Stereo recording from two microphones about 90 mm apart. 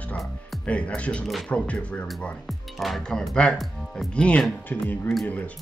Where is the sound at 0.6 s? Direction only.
15° left (ahead or behind).